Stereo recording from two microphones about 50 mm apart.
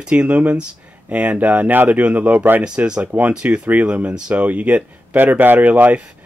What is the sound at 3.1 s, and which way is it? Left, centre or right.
Speech, right.